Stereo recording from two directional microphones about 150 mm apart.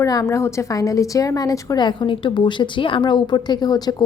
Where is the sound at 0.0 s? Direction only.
20° left (ahead or behind).